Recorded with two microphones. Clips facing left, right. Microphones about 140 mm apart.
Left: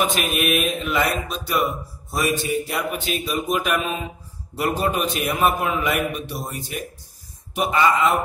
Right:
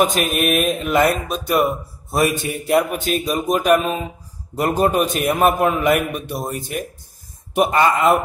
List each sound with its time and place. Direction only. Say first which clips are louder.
0.0 s a man's voice: right 4 dB; 45° right (ahead or behind)
2.1 s a man's voice: right 3 dB; 60° right (ahead or behind)